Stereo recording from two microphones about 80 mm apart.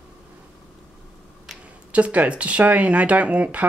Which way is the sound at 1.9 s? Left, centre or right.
Centre.